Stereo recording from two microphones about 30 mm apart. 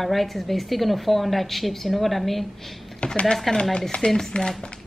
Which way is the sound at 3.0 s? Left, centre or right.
Left.